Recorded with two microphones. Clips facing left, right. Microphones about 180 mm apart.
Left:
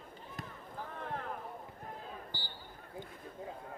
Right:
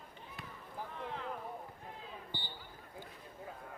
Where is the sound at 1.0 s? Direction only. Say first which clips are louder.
Left 2 dB; 50° left (ahead or behind).